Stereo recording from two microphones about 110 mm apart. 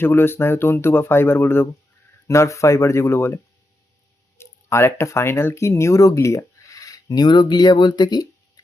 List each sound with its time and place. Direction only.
0.0 s speech: 20° left (ahead or behind); by 8.3 s 40° left (ahead or behind)